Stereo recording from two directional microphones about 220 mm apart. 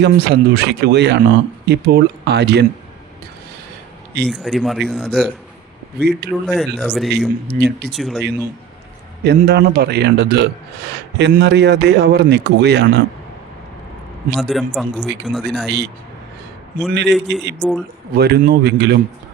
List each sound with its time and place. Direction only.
0.0 s speech: 50° right (ahead or behind)
4.3 s speech: centre (ahead or behind)
6.0 s speech: 50° right (ahead or behind)
6.5 s speech: 5° left (ahead or behind)
7.5 s speech: 35° right (ahead or behind)
7.9 s speech: centre (ahead or behind)
9.2 s speech: 50° right (ahead or behind)
14.5 s speech: centre (ahead or behind)
16.9 s speech: 50° right (ahead or behind)
17.6 s speech: centre (ahead or behind)
18.1 s speech: 45° right (ahead or behind)